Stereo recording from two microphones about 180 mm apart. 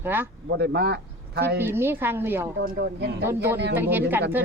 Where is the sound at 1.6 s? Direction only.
10° right (ahead or behind).